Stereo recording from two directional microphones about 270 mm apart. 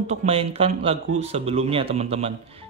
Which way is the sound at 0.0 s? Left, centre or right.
Right.